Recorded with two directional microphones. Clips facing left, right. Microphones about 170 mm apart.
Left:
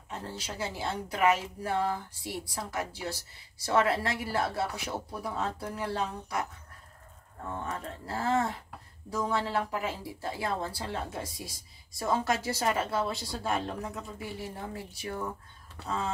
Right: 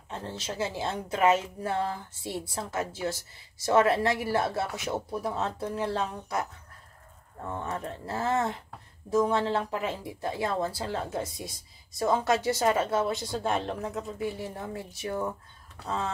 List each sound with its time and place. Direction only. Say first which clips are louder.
0.1 s speech: right 3 dB; 25° right (ahead or behind)
7.6 s speech: right 3 dB; 25° right (ahead or behind)